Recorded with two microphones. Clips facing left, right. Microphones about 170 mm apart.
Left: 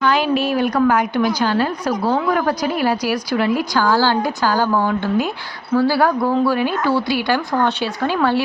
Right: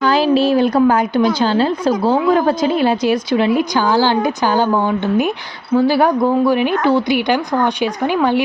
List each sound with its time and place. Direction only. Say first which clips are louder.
0.0 s a woman's voice: right 4 dB; 30° right (ahead or behind); by 8.4 s 15° right (ahead or behind)